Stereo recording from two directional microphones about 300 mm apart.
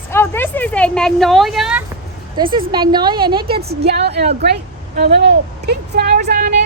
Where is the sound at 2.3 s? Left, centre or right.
Centre.